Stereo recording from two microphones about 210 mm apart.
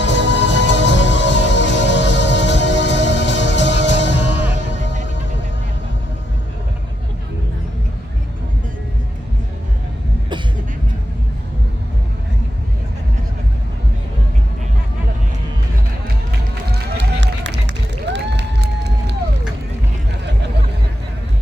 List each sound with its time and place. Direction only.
0.0 s music: 55° left (ahead or behind)
16.7 s run: 60° right (ahead or behind)